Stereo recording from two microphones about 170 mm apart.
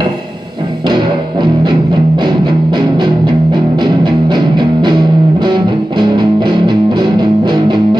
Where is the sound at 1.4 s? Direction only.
25° right (ahead or behind).